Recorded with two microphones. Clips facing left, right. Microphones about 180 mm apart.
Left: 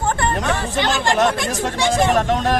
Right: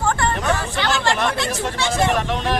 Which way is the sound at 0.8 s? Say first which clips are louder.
Left 2 dB; 20° left (ahead or behind).